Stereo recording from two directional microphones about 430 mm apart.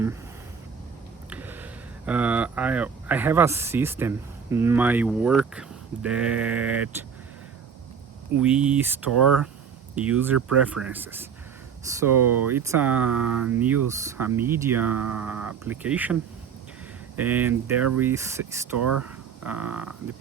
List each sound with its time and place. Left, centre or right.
1.3 s a sound: centre
2.0 s speech: centre
8.4 s speech: centre
12.2 s speech: right
12.5 s speech: centre
17.2 s speech: centre
18.8 s speech: right
19.0 s speech: centre